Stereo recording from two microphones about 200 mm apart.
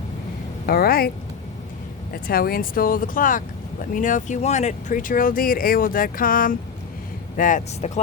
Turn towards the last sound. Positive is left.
turn(degrees=40)  # may be behind; listen again after turning